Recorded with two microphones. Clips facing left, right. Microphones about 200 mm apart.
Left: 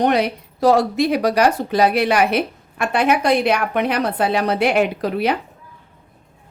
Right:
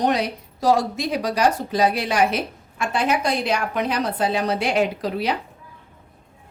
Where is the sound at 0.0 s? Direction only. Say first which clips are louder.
Left 4 dB; 60° left (ahead or behind).